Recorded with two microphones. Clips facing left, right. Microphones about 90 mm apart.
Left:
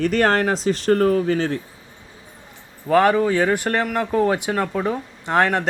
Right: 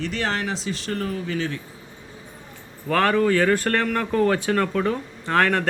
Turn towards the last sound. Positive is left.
turn(degrees=20)  # may be behind; listen again after turning